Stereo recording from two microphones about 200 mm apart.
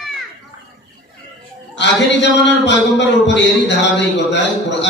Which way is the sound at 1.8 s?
60° left (ahead or behind).